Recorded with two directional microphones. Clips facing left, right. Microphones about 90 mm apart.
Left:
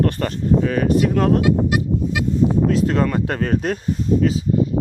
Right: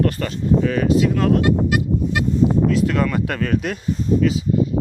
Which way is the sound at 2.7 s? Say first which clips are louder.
Left 1 dB; 35° left (ahead or behind).